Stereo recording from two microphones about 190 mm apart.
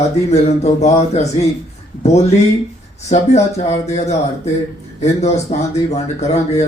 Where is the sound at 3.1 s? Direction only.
35° left (ahead or behind).